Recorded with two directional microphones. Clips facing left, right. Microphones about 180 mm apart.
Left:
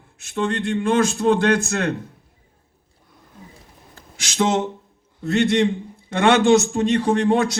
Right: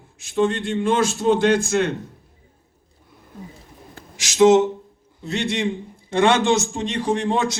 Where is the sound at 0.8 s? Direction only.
50° left (ahead or behind).